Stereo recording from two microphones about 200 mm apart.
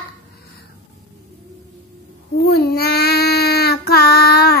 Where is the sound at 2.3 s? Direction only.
50° left (ahead or behind).